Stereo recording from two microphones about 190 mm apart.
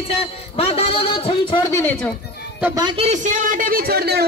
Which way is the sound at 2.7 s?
25° right (ahead or behind).